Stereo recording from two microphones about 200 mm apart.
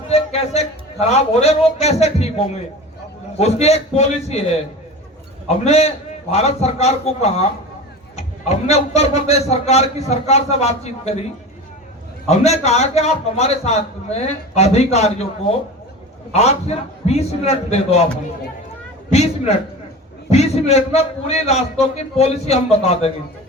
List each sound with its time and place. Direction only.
0.1 s a man's voice: 30° left (ahead or behind)
5.5 s a man's voice: 30° left (ahead or behind)
12.3 s a man's voice: 35° left (ahead or behind)
19.1 s a man's voice: 30° left (ahead or behind)